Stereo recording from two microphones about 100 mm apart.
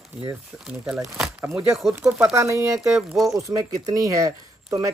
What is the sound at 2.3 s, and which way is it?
Speech, 30° right (ahead or behind).